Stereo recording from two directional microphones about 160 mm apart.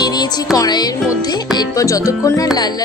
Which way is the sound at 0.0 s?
25° left (ahead or behind).